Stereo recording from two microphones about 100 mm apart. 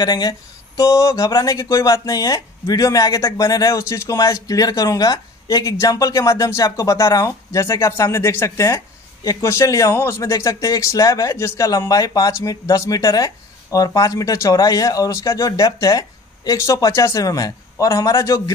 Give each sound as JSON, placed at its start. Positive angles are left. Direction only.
{"t": 0.0, "sound": "speech", "side_deg": 45}